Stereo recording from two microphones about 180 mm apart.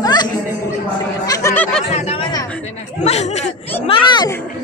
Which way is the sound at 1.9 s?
35° left (ahead or behind).